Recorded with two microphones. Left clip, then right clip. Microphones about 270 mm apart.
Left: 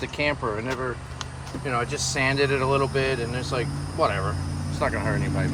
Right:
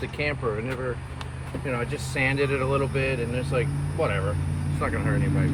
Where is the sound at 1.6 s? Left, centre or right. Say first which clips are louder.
Left 4 dB; left.